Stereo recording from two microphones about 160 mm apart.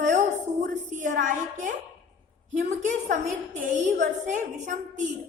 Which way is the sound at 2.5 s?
50° right (ahead or behind).